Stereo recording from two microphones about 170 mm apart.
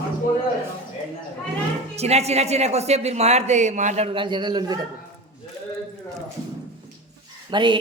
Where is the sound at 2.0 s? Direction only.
40° right (ahead or behind); by 4.9 s 25° right (ahead or behind).